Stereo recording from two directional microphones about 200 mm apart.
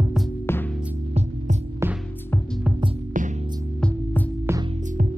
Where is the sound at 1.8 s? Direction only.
15° right (ahead or behind).